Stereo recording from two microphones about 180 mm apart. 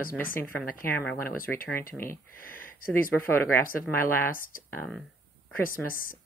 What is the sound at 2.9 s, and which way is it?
Speech, 10° left (ahead or behind).